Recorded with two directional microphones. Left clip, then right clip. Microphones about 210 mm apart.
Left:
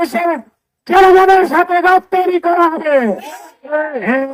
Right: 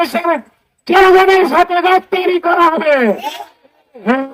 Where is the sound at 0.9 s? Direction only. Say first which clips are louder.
Left 1 dB; 55° left (ahead or behind).